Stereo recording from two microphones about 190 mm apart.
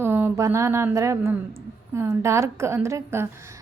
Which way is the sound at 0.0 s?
10° right (ahead or behind).